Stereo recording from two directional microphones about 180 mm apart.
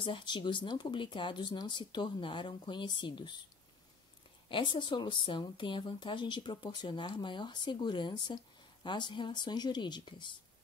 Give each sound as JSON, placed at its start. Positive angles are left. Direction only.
{"t": 0.0, "sound": "speech", "side_deg": 25}
{"t": 4.5, "sound": "speech", "side_deg": 25}